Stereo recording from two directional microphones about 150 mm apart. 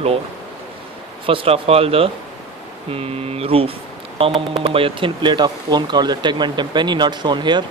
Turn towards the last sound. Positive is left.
turn(degrees=-30)  # may be behind; listen again after turning